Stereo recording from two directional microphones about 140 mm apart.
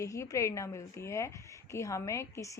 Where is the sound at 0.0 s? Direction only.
25° left (ahead or behind).